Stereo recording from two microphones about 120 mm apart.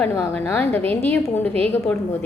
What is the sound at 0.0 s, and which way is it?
A woman's voice, 15° left (ahead or behind).